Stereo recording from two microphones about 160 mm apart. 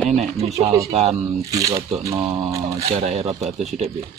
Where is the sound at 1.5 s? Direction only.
20° right (ahead or behind).